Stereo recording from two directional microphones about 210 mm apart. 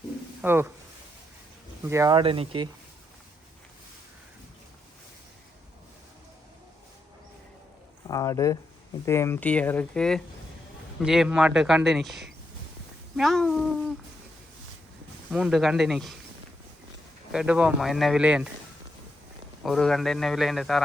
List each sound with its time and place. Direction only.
0.4 s speech: 10° right (ahead or behind)
1.8 s speech: 15° right (ahead or behind)
8.0 s speech: 15° left (ahead or behind); by 12.3 s centre (ahead or behind)
13.1 s a sound: centre (ahead or behind)
15.3 s speech: 5° right (ahead or behind)
17.3 s speech: 5° right (ahead or behind)
19.6 s speech: centre (ahead or behind)